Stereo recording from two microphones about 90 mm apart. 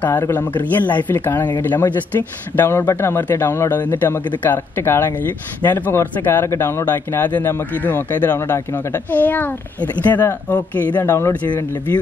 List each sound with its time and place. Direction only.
0.3 s speech: 20° left (ahead or behind)
3.8 s speech: 20° left (ahead or behind)
11.0 s speech: 30° left (ahead or behind)